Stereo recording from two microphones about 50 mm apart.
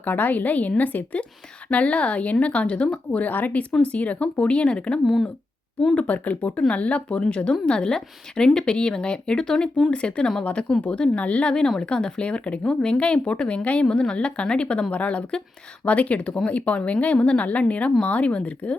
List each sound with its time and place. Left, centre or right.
0.0 s a woman's voice: left
11.8 s speech: centre